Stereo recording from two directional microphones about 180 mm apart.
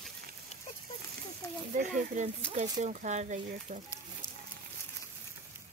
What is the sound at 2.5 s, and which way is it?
Speech, 40° right (ahead or behind).